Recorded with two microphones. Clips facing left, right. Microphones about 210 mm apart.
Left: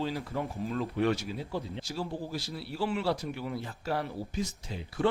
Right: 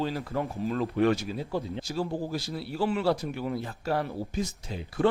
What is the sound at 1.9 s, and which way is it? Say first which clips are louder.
Speech: right 5 dB; 50° right (ahead or behind).